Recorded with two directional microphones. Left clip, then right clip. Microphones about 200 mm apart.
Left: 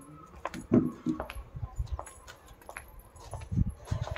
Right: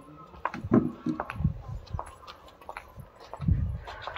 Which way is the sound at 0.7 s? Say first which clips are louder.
Right 1 dB; 30° right (ahead or behind).